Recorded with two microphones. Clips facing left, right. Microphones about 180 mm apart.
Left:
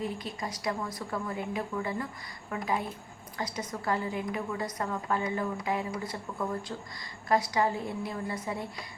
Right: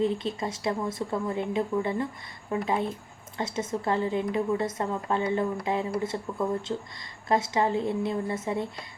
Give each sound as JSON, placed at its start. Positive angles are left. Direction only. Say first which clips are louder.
{"t": 0.0, "sound": "a woman's voice", "louder": "right 8 dB", "side_deg": -25}